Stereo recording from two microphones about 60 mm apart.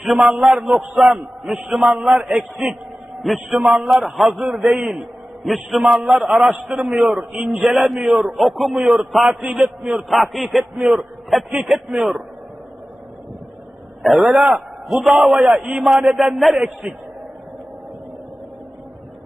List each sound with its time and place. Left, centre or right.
0.0 s a man's voice: centre
3.2 s a man's voice: centre
6.7 s a man's voice: centre
8.8 s a man's voice: centre
10.1 s a man's voice: centre
10.8 s a man's voice: centre
11.3 s a man's voice: centre
11.9 s a man's voice: centre
14.0 s a man's voice: centre
14.8 s a man's voice: centre
15.8 s a man's voice: centre